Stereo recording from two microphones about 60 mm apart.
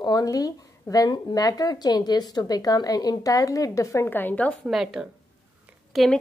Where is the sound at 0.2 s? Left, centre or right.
Left.